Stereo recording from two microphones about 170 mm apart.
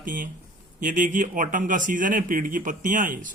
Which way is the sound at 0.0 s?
50° right (ahead or behind).